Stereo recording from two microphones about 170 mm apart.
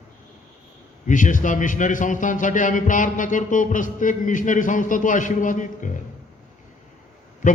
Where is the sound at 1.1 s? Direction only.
50° left (ahead or behind).